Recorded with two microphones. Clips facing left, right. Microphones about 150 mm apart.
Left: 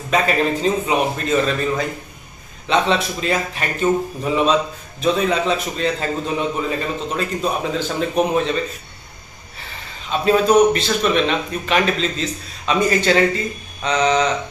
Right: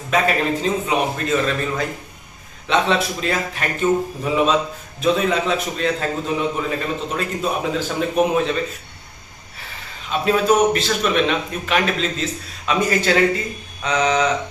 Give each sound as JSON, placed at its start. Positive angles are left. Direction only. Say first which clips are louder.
{"t": 0.1, "sound": "a man's voice", "louder": "left 1 dB", "side_deg": 0}
{"t": 10.1, "sound": "a man's voice", "louder": "left 2 dB", "side_deg": -5}